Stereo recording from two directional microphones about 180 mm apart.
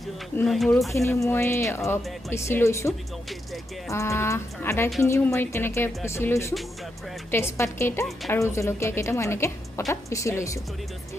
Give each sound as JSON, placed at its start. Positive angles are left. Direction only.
{"t": 0.4, "sound": "speech", "side_deg": 0}
{"t": 0.9, "sound": "speech", "side_deg": 15}